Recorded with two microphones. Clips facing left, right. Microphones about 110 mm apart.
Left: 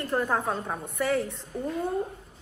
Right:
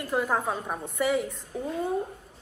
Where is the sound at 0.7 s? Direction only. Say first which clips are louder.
Right 2 dB; 15° right (ahead or behind).